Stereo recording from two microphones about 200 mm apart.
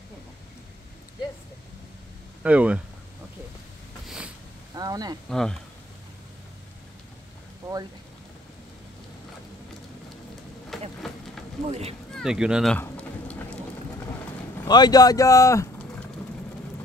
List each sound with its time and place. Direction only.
2.4 s speech: 5° right (ahead or behind)
4.0 s a sound: 5° right (ahead or behind)
4.7 s speech: 20° right (ahead or behind)
5.3 s speech: centre (ahead or behind)
10.7 s a sound: centre (ahead or behind)
11.6 s speech: 30° right (ahead or behind)
12.1 s speech: centre (ahead or behind)
12.7 s a sound: 5° left (ahead or behind)
14.6 s speech: 20° left (ahead or behind)